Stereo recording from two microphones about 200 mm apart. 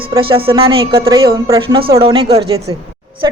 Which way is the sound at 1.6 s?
25° right (ahead or behind).